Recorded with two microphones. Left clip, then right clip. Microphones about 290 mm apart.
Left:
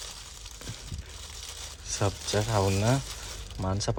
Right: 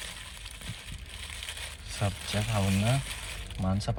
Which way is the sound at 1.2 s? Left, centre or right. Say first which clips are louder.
Right 3 dB; centre.